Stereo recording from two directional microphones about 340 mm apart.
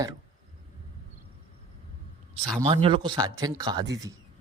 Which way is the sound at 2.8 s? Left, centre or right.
Centre.